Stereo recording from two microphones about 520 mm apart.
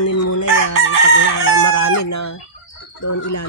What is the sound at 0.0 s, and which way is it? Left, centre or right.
Chicken, left.